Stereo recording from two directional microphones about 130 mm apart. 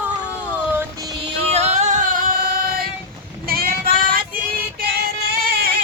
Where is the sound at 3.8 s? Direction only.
90° right.